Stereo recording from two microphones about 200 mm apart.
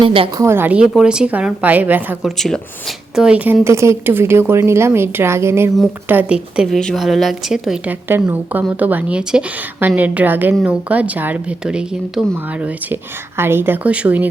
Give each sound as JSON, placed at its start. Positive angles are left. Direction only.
{"t": 0.0, "sound": "a woman's voice", "side_deg": -25}
{"t": 0.4, "sound": "a woman's voice", "side_deg": -10}